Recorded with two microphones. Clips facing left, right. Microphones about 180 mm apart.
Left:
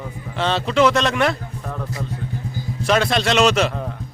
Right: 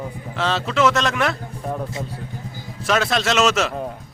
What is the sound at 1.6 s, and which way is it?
Speech, 25° right (ahead or behind).